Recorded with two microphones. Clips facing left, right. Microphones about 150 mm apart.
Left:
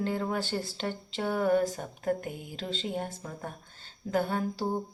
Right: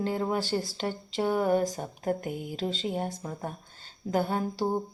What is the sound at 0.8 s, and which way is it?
Mantra, 10° right (ahead or behind).